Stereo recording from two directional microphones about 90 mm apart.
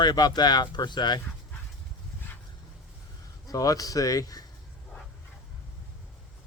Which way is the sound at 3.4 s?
40° left (ahead or behind).